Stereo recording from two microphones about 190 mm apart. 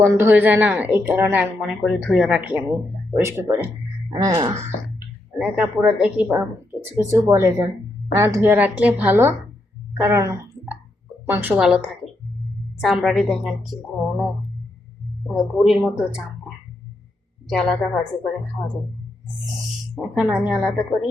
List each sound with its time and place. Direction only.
0.0 s a woman's voice: 10° right (ahead or behind)
5.4 s a woman's voice: 5° right (ahead or behind)
15.3 s a woman's voice: centre (ahead or behind)
17.5 s a woman's voice: centre (ahead or behind)
20.0 s a woman's voice: 5° right (ahead or behind)